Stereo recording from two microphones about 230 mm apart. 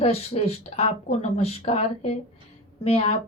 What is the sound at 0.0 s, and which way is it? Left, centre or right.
Speech, left.